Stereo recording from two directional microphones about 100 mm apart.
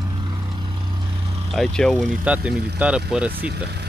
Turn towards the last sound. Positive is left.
turn(degrees=-10)  # may be behind; listen again after turning